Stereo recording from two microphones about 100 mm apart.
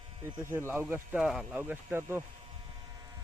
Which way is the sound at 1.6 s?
20° right (ahead or behind).